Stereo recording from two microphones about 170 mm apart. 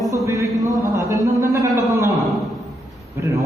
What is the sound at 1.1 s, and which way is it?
A man's voice, 20° right (ahead or behind).